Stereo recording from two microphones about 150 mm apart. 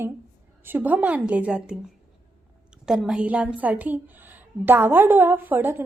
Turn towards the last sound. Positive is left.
turn(degrees=-15)  # may be behind; listen again after turning